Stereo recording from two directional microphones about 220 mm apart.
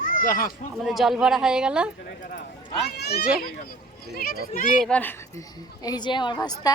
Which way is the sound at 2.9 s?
45° left (ahead or behind).